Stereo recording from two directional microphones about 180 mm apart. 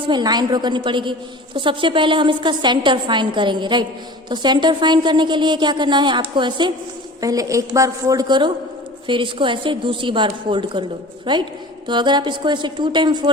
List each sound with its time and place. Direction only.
0.0 s a woman's voice: 25° right (ahead or behind)